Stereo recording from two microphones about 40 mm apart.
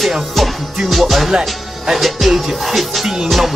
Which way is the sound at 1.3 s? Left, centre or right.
Centre.